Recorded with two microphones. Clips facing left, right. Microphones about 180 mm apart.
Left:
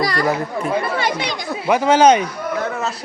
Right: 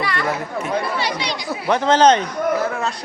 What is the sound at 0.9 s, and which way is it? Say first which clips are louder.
Speech: left 2 dB; 50° left (ahead or behind).